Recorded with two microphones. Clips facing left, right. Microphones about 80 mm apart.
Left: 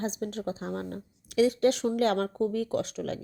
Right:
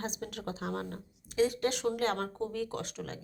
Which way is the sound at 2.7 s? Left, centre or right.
Right.